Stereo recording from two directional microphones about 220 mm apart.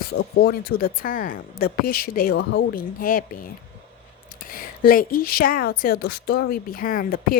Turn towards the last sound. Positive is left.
turn(degrees=40)  # may be behind; listen again after turning